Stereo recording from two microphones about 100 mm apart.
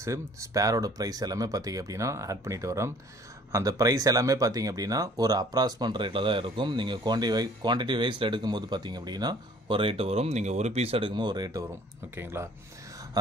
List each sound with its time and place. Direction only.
0.0 s speech: 30° right (ahead or behind)
12.2 s speech: 25° right (ahead or behind)